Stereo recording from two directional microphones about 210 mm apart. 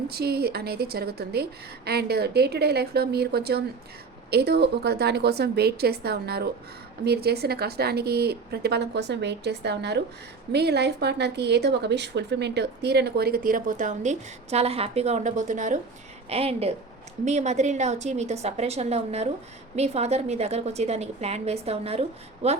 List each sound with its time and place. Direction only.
0.1 s a woman's voice: 50° right (ahead or behind); by 22.6 s 30° right (ahead or behind)